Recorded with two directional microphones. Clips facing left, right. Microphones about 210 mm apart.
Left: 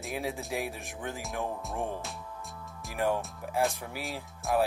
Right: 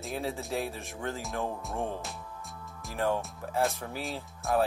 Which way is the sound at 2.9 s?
15° left (ahead or behind).